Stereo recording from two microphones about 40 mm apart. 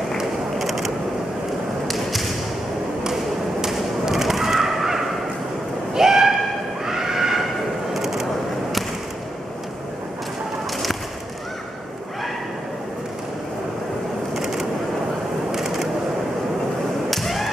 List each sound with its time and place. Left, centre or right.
0.6 s mechanisms: centre
1.9 s whip: centre
3.6 s thump: centre
5.9 s a sound: centre
6.9 s neigh: centre
7.9 s a sound: centre
14.3 s vehicle: centre
15.5 s a sound: centre
17.1 s whip: centre